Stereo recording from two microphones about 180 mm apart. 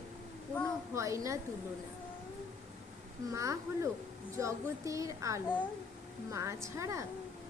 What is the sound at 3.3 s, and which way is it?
A woman's voice, 15° right (ahead or behind).